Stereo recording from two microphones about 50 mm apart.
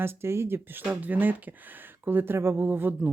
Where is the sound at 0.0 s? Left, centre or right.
Right.